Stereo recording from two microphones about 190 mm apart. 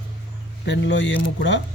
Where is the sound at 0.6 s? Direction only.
70° left (ahead or behind).